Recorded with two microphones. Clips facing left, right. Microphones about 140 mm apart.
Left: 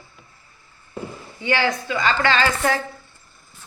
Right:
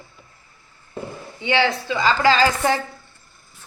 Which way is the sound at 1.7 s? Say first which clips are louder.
Right 2 dB; 30° right (ahead or behind).